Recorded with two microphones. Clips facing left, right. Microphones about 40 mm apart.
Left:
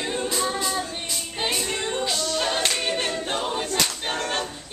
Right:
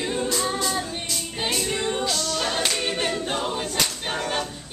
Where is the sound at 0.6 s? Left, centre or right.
Centre.